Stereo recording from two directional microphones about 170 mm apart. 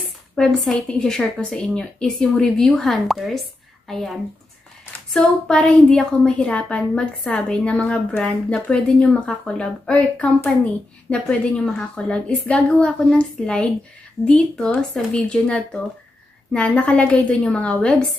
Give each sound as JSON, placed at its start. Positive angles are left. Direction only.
{"t": 0.4, "sound": "a woman's voice", "side_deg": 5}